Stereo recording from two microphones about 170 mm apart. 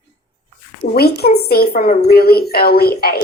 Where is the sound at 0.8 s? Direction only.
70° left (ahead or behind).